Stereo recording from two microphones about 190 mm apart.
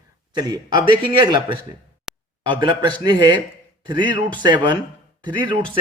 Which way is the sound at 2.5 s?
25° right (ahead or behind).